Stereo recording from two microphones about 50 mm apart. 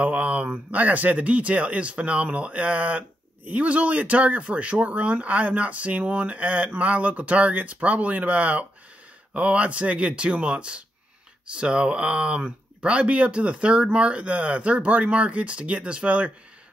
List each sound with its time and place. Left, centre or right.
0.0 s speech: right